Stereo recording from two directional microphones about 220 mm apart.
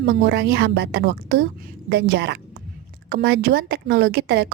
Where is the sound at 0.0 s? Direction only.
50° right (ahead or behind).